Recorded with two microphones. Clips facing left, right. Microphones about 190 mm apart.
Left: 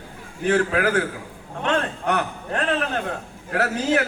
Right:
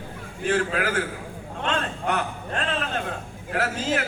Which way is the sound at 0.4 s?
60° left (ahead or behind).